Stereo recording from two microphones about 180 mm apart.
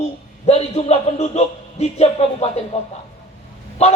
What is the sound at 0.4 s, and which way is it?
A man's voice, 35° left (ahead or behind).